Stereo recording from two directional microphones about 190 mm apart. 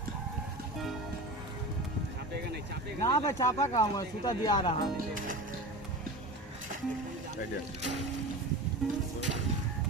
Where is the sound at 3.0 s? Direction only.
15° left (ahead or behind).